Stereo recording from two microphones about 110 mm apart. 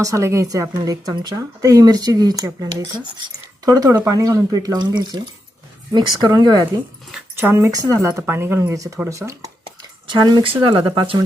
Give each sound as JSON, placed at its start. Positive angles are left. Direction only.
{"t": 0.0, "sound": "a woman's voice", "side_deg": -30}
{"t": 7.3, "sound": "speech", "side_deg": -20}
{"t": 9.6, "sound": "a sound", "side_deg": -45}
{"t": 10.4, "sound": "speech", "side_deg": -50}